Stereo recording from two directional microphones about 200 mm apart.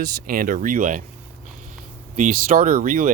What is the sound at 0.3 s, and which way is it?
Speech, 45° right (ahead or behind).